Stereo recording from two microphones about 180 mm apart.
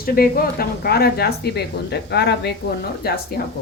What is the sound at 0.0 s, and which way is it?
Speech, 55° left (ahead or behind).